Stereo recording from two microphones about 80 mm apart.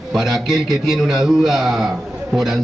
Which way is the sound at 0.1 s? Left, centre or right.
Centre.